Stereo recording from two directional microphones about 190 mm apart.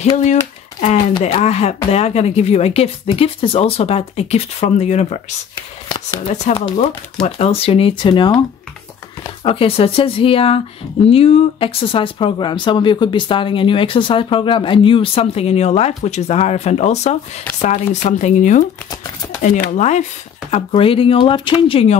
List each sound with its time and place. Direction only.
0.2 s a sound: 40° left (ahead or behind)
1.2 s speech: 35° left (ahead or behind)
5.9 s speech: 20° left (ahead or behind)
6.2 s speech: 35° left (ahead or behind)
9.4 s speech: 30° left (ahead or behind)
19.8 s speech: 40° left (ahead or behind)